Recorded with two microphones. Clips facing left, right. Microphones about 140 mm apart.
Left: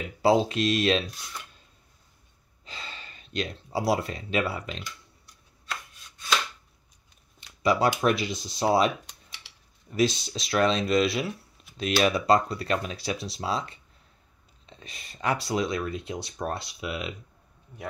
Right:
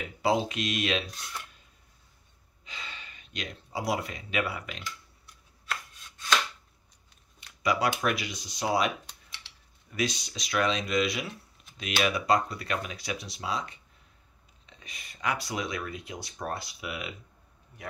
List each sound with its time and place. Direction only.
0.2 s speech: 30° left (ahead or behind)
2.6 s speech: 35° left (ahead or behind)
7.6 s speech: 30° left (ahead or behind)
9.9 s speech: 30° left (ahead or behind)